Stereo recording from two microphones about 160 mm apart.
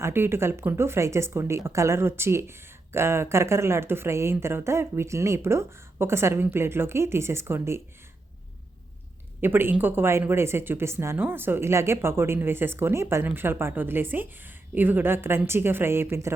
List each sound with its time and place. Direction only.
0.0 s speech: 15° right (ahead or behind)
9.4 s speech: 15° right (ahead or behind)